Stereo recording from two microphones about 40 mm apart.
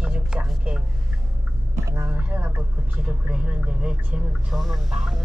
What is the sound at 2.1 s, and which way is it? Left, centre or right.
Speech, right.